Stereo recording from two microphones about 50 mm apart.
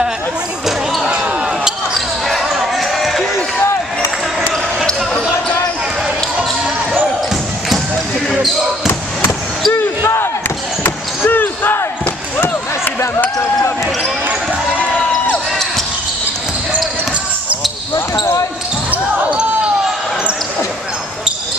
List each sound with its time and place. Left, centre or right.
1.0 s basketball bounce: centre
2.0 s basketball bounce: centre
9.7 s basketball bounce: left
10.8 s basketball bounce: left
17.9 s basketball bounce: left